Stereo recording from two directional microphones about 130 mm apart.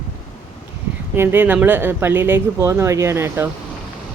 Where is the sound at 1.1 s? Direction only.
15° right (ahead or behind).